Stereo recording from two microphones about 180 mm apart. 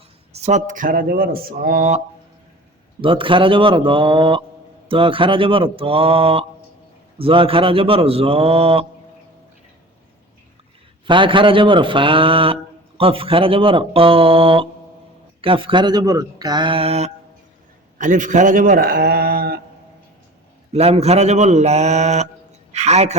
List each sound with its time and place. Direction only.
0.3 s speech: 40° right (ahead or behind)
3.0 s speech: 30° right (ahead or behind)
11.0 s speech: 25° right (ahead or behind)
17.9 s a man's voice: 45° right (ahead or behind)
20.7 s speech: 35° right (ahead or behind)